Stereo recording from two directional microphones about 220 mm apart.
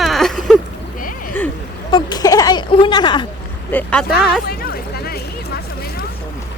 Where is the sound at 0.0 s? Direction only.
Centre (ahead or behind).